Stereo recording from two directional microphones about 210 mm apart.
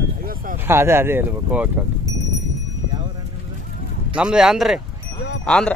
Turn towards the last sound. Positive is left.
turn(degrees=5)  # may be behind; listen again after turning